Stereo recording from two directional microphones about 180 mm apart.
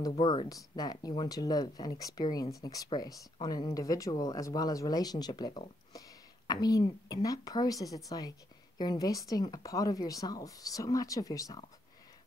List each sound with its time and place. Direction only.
0.1 s speech: 30° left (ahead or behind)